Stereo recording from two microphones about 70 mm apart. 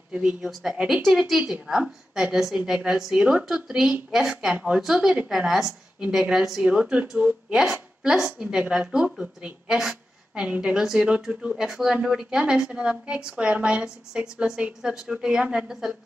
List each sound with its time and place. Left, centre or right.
0.1 s speech: centre
0.5 s a woman's voice: centre
6.7 s a woman's voice: centre